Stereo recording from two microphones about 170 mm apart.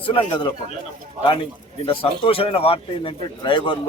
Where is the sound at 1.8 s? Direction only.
30° left (ahead or behind).